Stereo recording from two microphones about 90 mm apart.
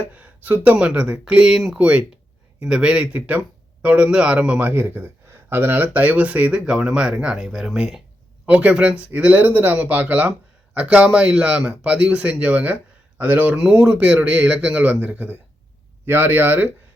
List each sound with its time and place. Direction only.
0.0 s speech: 20° right (ahead or behind)
4.7 s speech: 25° right (ahead or behind); by 8.0 s 5° right (ahead or behind)
8.4 s speech: 15° right (ahead or behind)